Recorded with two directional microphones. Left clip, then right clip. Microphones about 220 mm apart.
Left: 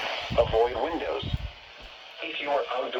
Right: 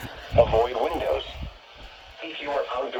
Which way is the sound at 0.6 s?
40° right (ahead or behind).